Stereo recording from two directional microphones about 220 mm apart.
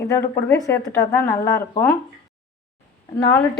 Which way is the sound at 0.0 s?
10° left (ahead or behind).